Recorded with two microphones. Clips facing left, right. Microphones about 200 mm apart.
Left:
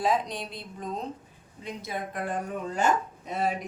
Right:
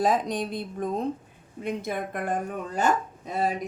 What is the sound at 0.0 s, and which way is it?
A woman's voice, 45° right (ahead or behind).